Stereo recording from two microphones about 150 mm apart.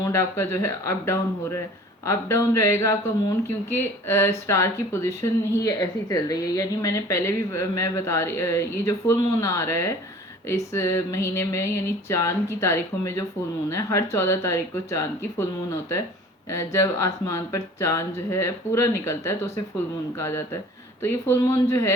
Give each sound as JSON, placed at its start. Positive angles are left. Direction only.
{"t": 0.0, "sound": "speech", "side_deg": 15}
{"t": 4.1, "sound": "speech", "side_deg": 20}
{"t": 16.5, "sound": "speech", "side_deg": 20}